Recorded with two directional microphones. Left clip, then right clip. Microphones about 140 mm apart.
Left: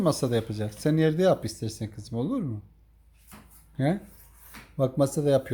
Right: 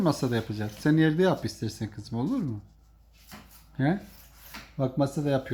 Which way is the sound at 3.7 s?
20° left (ahead or behind).